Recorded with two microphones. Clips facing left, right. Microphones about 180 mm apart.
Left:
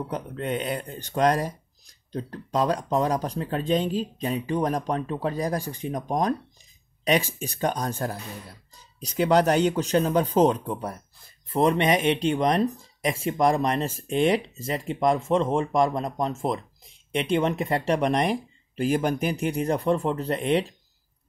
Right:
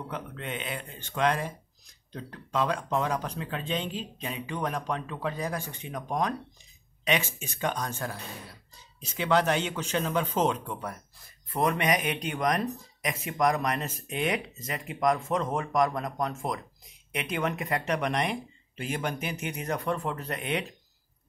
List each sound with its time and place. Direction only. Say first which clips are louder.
0.1 s speech: left 7 dB; 40° left (ahead or behind)